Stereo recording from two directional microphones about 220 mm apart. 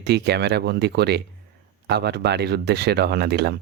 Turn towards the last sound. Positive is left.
turn(degrees=-50)  # may be behind; listen again after turning